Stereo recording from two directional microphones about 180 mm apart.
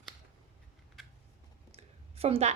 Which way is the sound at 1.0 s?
Centre (ahead or behind).